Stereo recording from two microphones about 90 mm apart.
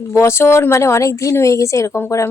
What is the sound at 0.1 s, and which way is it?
A woman's voice, 30° left (ahead or behind).